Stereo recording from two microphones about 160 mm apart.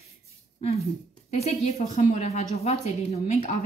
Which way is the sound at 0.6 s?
40° left (ahead or behind).